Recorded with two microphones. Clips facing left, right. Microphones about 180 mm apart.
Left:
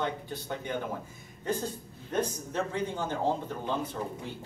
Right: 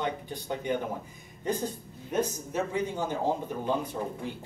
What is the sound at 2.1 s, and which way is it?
Speech, 10° right (ahead or behind).